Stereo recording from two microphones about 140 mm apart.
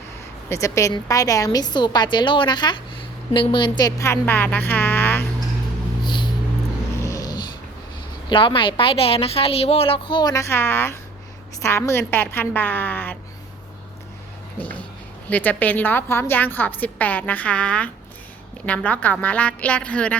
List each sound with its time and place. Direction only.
0.4 s a woman's voice: 20° left (ahead or behind)
6.0 s a sound: 35° left (ahead or behind)
7.0 s dog: 25° left (ahead or behind)
8.3 s a woman's voice: 35° left (ahead or behind); by 13.1 s 15° left (ahead or behind)
15.3 s a woman's voice: 10° left (ahead or behind)